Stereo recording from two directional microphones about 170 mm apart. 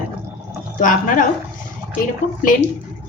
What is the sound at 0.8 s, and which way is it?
A woman's voice, 50° left (ahead or behind).